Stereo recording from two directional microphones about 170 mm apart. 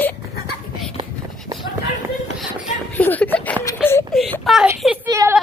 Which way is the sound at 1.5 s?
25° right (ahead or behind).